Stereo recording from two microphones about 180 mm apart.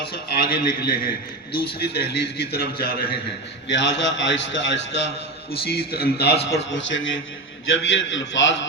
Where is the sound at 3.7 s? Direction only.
80° left.